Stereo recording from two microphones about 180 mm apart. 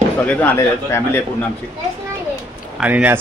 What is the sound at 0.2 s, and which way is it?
A man's voice, 10° left (ahead or behind).